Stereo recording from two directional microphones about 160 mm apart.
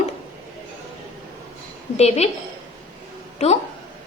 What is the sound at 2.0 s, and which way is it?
Speech, 40° left (ahead or behind).